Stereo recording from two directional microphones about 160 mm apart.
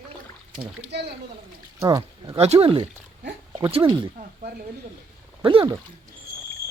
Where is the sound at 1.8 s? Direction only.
20° right (ahead or behind).